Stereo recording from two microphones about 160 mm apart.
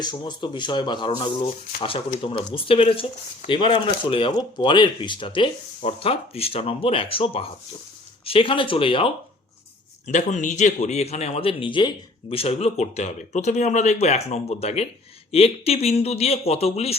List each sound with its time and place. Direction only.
0.0 s speech: 30° left (ahead or behind)
10.1 s a man's voice: 50° left (ahead or behind)